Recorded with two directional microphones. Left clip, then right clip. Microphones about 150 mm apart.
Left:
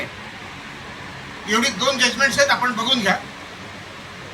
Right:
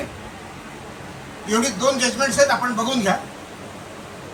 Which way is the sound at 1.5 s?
50° right (ahead or behind).